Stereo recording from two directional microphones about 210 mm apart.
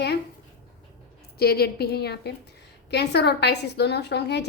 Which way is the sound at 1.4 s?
45° left (ahead or behind).